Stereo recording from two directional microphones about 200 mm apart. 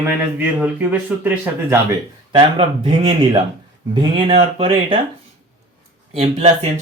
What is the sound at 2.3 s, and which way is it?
Speech, 30° right (ahead or behind).